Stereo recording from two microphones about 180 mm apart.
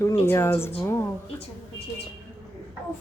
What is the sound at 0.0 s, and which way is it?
Speech, 15° left (ahead or behind).